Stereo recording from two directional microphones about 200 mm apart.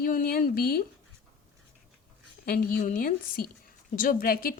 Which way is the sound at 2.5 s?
45° left (ahead or behind).